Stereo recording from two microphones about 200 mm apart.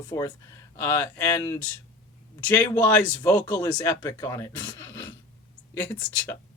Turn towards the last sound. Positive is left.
turn(degrees=10)  # may be behind; listen again after turning